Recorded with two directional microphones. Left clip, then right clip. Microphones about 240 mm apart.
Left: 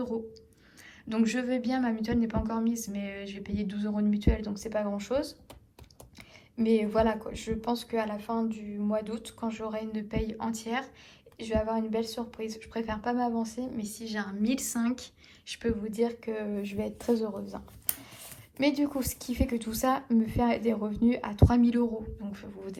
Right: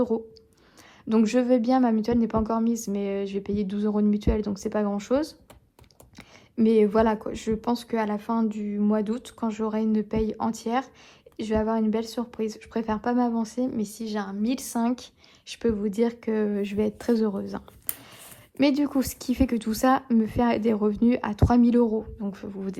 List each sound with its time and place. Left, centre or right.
1.0 s speech: right
6.6 s speech: right
18.9 s speech: right